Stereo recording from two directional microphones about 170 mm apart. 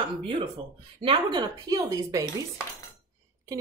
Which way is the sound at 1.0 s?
30° right (ahead or behind).